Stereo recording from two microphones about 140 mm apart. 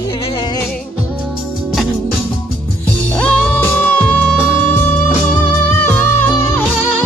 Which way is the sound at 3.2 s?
10° left (ahead or behind).